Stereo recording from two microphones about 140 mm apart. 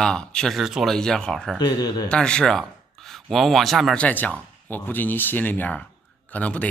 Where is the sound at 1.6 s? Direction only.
30° left (ahead or behind).